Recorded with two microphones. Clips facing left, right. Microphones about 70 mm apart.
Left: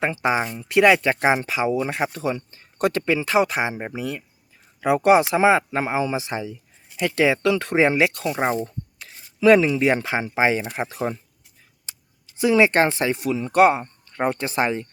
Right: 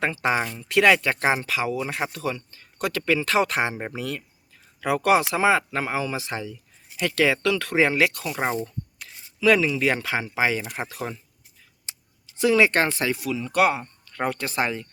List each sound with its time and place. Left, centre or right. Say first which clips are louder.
0.0 s speech: left 2 dB; centre; by 3.0 s left
3.0 s speech: even; centre
8.4 s speech: left 3 dB; centre
8.6 s speech: left 1 dB; left
12.4 s speech: left 2 dB; left